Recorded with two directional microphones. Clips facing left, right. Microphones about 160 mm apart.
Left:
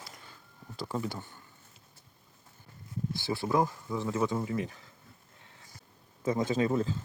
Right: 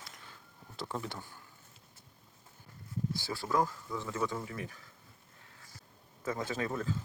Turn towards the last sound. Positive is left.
turn(degrees=25)  # may be behind; listen again after turning